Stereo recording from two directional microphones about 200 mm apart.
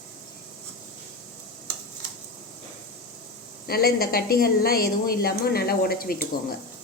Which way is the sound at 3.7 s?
50° left (ahead or behind).